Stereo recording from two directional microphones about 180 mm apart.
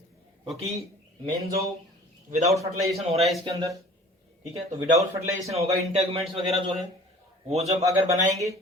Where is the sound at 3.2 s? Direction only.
Centre (ahead or behind).